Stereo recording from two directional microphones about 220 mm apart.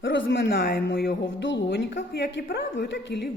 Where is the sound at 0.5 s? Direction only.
40° left (ahead or behind).